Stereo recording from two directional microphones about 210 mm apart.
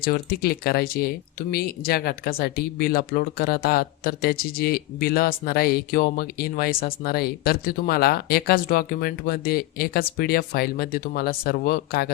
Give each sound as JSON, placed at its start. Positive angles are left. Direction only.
{"t": 0.0, "sound": "speech", "side_deg": 45}